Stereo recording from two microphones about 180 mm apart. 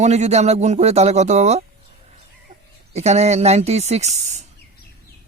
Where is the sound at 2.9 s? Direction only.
40° right (ahead or behind).